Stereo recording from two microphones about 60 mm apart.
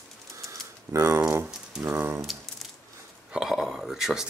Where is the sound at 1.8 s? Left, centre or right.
Right.